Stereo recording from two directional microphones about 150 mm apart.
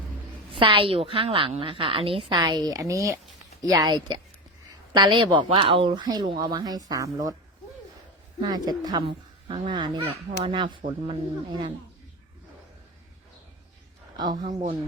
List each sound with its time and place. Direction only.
0.5 s a woman's voice: 35° right (ahead or behind)
8.4 s a woman's voice: 25° right (ahead or behind)
14.2 s speech: 30° right (ahead or behind)